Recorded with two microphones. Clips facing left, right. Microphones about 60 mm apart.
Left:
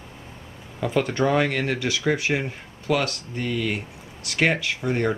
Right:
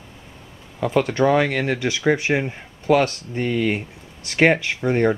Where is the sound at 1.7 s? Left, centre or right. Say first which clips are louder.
Right 4 dB; right.